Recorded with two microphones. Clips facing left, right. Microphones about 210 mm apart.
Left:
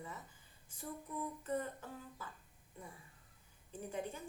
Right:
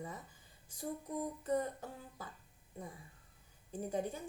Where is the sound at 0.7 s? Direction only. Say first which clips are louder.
Right 4 dB; 40° right (ahead or behind).